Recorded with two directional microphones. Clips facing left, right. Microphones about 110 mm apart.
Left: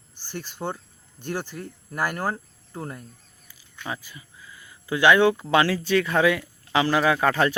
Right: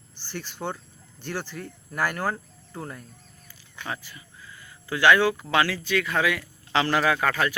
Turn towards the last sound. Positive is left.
turn(degrees=25)  # may be behind; listen again after turning